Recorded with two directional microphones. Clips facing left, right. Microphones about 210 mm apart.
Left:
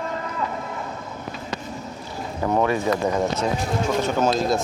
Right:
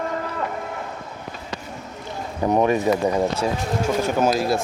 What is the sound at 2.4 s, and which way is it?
Speech, 20° right (ahead or behind).